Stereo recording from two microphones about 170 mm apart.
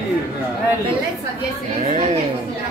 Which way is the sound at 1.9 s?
45° right (ahead or behind).